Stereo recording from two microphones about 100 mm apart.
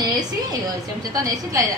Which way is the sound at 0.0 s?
45° right (ahead or behind).